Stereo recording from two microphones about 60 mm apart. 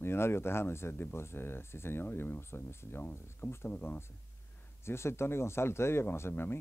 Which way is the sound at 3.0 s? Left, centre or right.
Left.